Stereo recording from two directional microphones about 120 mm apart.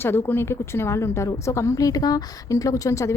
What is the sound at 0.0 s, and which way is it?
A woman's voice, 20° left (ahead or behind).